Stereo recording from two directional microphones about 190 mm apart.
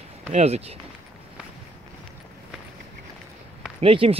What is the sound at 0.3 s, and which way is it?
Speech, 35° right (ahead or behind).